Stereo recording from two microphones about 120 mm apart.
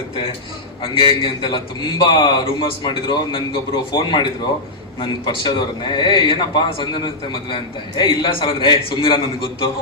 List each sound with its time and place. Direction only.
0.8 s a man's voice: 40° left (ahead or behind)